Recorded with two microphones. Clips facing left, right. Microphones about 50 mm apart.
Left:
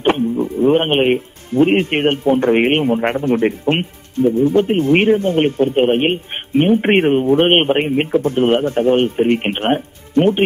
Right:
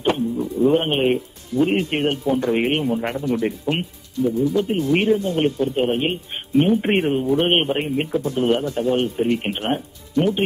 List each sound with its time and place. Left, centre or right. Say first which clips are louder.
0.0 s speech: left 5 dB; left